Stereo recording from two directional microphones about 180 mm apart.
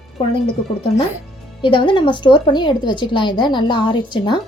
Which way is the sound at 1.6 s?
25° left (ahead or behind).